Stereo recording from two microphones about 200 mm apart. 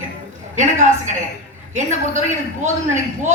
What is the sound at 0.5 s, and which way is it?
A man's voice, 35° right (ahead or behind).